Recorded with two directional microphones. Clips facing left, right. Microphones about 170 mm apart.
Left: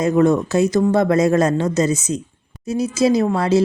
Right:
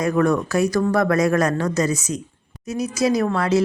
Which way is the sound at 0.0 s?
25° left (ahead or behind).